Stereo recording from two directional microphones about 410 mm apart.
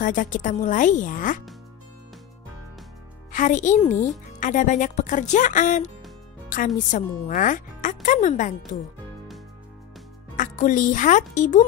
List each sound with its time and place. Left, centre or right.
0.0 s a woman's voice: centre
3.3 s a woman's voice: centre
10.3 s speech: centre